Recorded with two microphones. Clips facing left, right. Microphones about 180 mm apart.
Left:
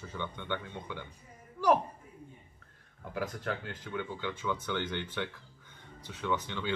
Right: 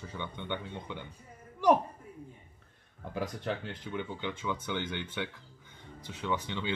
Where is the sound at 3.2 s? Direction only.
20° right (ahead or behind).